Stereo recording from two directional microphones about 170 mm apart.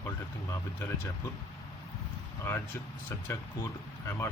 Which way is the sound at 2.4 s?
15° left (ahead or behind).